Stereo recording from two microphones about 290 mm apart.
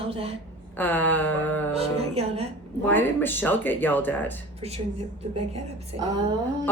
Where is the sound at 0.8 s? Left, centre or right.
Centre.